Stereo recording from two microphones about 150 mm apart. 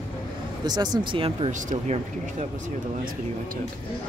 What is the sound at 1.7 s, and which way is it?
Speech, 50° right (ahead or behind).